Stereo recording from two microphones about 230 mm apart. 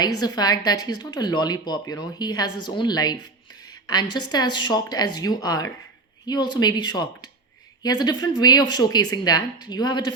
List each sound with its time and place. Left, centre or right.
0.2 s a woman's voice: centre